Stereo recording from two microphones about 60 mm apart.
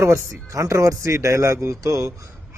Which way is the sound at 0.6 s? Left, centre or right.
Right.